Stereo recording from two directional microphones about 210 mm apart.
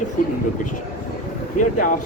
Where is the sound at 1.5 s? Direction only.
40° left (ahead or behind).